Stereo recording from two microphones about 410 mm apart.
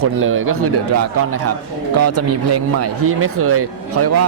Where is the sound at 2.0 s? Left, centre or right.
Right.